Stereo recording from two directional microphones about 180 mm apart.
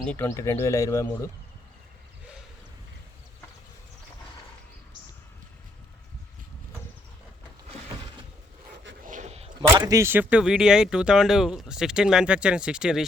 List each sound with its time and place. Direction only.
0.0 s speech: 10° left (ahead or behind)
9.0 s a sound: 40° right (ahead or behind)
9.6 s speech: 20° right (ahead or behind); by 13.1 s 5° right (ahead or behind)